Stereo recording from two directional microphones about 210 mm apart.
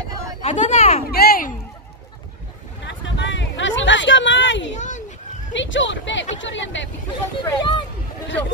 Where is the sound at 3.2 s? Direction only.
60° left (ahead or behind).